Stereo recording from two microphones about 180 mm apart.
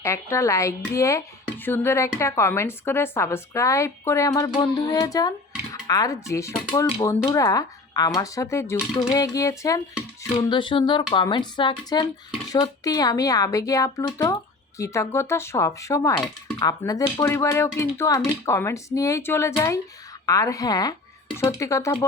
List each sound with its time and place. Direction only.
0.0 s speech: 15° left (ahead or behind)